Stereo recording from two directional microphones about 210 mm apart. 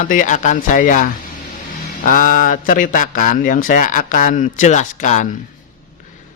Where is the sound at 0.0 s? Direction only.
40° left (ahead or behind).